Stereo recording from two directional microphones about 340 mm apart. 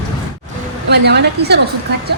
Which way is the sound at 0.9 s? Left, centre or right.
Right.